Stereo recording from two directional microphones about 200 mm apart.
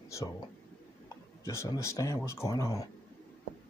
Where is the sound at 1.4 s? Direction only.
15° left (ahead or behind).